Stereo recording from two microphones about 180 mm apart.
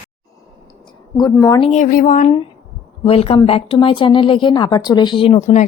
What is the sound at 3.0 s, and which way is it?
Speech, 30° left (ahead or behind).